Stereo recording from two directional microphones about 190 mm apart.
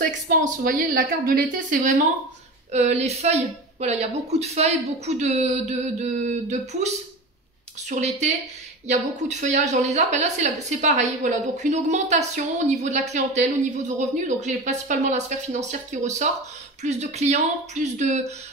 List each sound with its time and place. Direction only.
0.0 s a woman's voice: 45° right (ahead or behind)
7.9 s a woman's voice: 35° right (ahead or behind)